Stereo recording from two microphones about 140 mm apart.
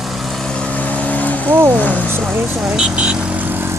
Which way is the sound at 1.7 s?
10° left (ahead or behind).